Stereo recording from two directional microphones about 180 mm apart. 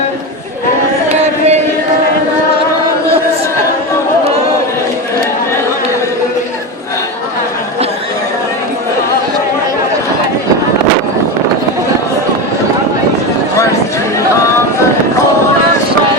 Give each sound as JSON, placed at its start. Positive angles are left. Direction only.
{"t": 1.2, "sound": "carnatic music", "side_deg": -35}